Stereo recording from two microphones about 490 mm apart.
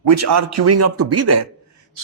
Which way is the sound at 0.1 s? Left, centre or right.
Right.